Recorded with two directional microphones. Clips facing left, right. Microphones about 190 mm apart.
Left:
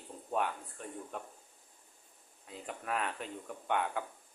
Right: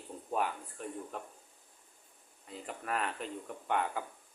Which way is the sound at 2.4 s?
Centre (ahead or behind).